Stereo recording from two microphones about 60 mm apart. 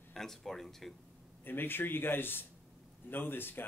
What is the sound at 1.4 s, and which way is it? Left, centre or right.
A man's voice, left.